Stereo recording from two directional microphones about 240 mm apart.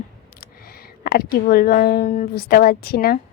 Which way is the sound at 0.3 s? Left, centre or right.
Left.